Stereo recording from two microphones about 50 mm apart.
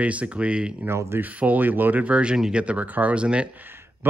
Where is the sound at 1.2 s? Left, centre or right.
Right.